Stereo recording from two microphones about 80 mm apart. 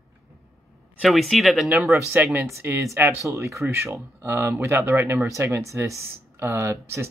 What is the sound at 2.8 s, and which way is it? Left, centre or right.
Speech, right.